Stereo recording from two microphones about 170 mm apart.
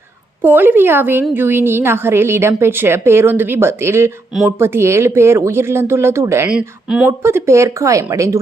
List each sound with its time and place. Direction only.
0.4 s a woman's voice: 10° right (ahead or behind)
6.5 s speech: 5° right (ahead or behind)
7.2 s a woman's voice: 15° right (ahead or behind)